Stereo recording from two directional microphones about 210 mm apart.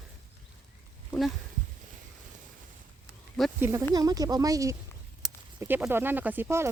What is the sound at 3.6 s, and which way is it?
Speech, 10° right (ahead or behind).